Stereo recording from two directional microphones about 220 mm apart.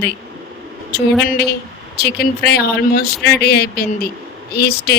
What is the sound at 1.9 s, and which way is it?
Speech, 45° left (ahead or behind).